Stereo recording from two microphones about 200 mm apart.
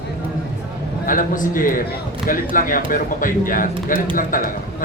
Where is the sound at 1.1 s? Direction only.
45° left (ahead or behind).